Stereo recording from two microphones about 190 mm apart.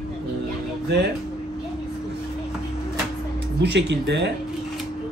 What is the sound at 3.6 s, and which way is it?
Speech, 65° right (ahead or behind).